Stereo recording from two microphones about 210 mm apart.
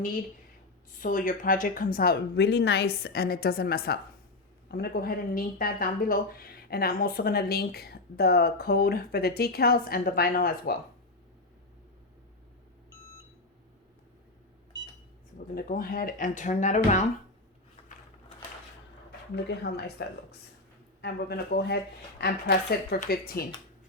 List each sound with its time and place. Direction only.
0.9 s speech: 40° left (ahead or behind)
15.5 s speech: 40° left (ahead or behind)
19.5 s speech: 50° left (ahead or behind)